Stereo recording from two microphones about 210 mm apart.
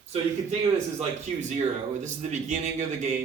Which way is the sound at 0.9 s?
35° right (ahead or behind).